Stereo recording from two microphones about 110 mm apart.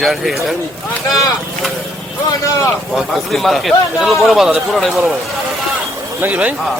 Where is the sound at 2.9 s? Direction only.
Centre (ahead or behind).